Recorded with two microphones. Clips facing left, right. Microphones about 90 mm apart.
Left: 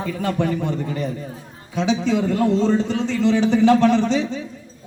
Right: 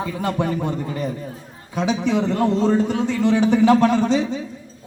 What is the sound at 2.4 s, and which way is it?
Speech, 15° right (ahead or behind).